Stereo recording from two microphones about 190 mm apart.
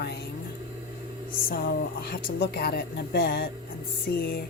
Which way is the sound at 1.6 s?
50° left (ahead or behind).